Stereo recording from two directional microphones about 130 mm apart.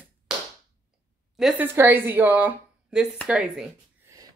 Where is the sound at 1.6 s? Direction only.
15° right (ahead or behind).